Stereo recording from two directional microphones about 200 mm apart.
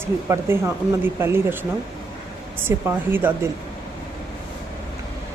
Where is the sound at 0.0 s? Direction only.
10° right (ahead or behind).